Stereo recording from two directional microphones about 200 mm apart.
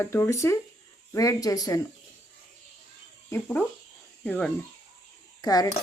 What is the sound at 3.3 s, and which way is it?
Cutlery, 10° left (ahead or behind).